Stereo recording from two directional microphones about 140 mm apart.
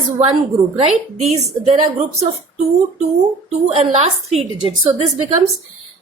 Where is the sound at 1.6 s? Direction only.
55° right (ahead or behind).